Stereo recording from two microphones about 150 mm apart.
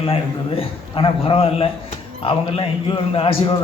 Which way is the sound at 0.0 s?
40° left (ahead or behind).